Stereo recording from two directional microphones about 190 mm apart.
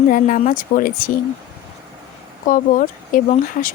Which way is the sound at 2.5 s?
45° left (ahead or behind).